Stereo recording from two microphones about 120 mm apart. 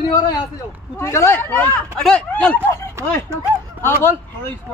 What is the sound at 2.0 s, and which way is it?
Speech, 5° left (ahead or behind).